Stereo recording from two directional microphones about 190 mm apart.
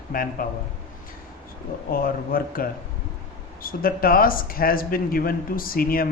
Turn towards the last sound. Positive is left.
turn(degrees=50)  # may be behind; listen again after turning